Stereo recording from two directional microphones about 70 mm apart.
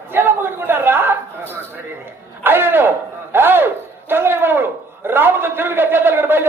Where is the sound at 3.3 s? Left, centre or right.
Right.